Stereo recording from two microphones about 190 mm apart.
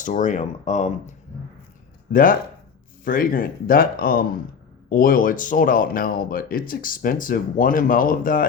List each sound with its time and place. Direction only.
0.0 s speech: 40° left (ahead or behind)
3.0 s speech: 50° left (ahead or behind)